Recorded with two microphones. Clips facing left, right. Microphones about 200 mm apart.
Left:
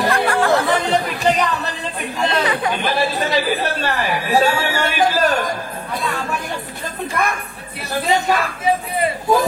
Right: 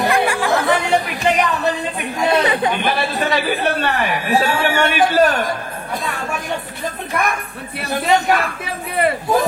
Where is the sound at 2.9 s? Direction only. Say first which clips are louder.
Even; 60° right (ahead or behind).